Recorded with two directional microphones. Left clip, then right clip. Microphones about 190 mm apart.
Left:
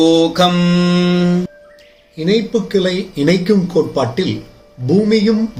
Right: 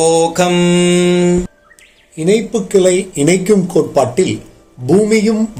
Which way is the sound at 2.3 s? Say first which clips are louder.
Right 2 dB; centre (ahead or behind).